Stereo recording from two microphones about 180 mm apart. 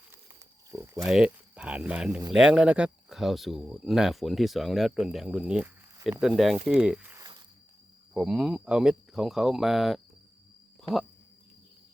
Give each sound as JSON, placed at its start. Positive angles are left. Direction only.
{"t": 0.7, "sound": "speech", "side_deg": -15}
{"t": 7.2, "sound": "walk", "side_deg": -25}
{"t": 8.1, "sound": "speech", "side_deg": 0}